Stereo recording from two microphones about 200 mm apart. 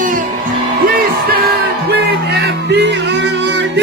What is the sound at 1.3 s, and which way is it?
Music, 50° right (ahead or behind).